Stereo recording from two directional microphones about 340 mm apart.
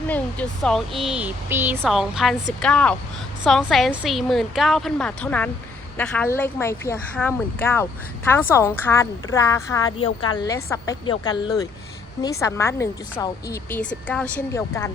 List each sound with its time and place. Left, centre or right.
0.1 s speech: centre